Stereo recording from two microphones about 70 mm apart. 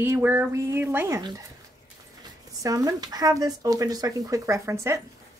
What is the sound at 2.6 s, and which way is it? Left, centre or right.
Speech, right.